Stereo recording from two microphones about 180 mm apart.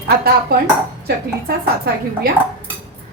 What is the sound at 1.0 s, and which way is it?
A woman's voice, 60° right (ahead or behind).